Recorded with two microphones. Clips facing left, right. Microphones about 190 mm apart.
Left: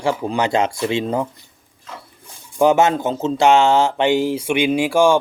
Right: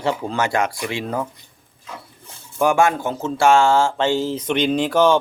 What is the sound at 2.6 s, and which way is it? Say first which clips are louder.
Speech: left 3 dB; 20° left (ahead or behind).